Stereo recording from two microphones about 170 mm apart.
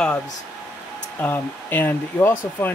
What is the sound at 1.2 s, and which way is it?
Speech, 10° left (ahead or behind).